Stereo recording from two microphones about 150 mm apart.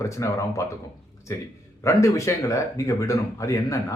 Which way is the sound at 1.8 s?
20° left (ahead or behind).